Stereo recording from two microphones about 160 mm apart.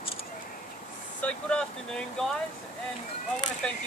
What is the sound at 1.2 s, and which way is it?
Speech, 5° left (ahead or behind).